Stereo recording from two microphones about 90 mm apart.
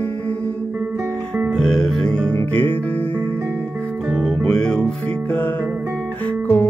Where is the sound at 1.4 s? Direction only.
10° left (ahead or behind).